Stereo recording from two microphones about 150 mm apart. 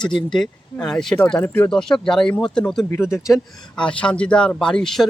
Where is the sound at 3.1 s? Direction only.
20° left (ahead or behind).